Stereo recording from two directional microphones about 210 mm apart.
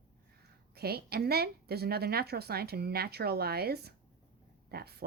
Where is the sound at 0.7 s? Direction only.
50° right (ahead or behind).